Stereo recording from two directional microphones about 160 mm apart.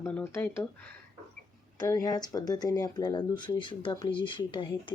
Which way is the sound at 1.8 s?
20° left (ahead or behind).